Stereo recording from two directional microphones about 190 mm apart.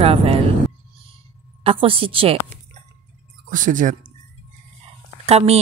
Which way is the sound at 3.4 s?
45° right (ahead or behind).